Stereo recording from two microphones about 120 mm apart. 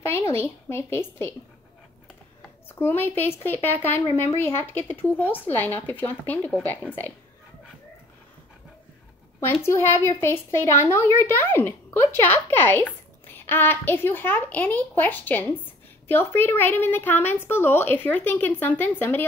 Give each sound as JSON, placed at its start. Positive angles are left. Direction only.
{"t": 0.0, "sound": "a woman's voice", "side_deg": 20}
{"t": 2.7, "sound": "a woman's voice", "side_deg": 15}
{"t": 9.5, "sound": "a woman's voice", "side_deg": 20}